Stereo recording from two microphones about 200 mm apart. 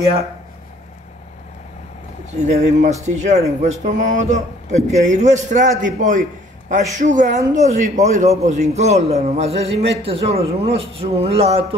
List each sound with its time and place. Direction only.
2.4 s speech: 35° right (ahead or behind)